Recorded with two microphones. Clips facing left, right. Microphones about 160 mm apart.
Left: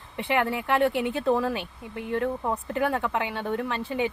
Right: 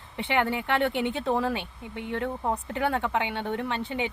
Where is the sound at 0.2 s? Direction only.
25° right (ahead or behind).